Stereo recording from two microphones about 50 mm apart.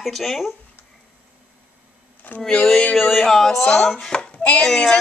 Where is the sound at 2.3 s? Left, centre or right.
Left.